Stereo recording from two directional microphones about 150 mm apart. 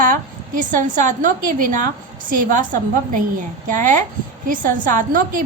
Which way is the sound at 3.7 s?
60° right (ahead or behind).